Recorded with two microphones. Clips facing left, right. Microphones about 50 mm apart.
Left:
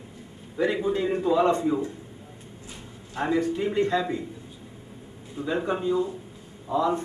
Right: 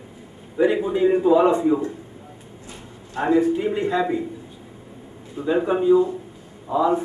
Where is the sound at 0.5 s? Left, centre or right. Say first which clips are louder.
Right 5 dB; centre.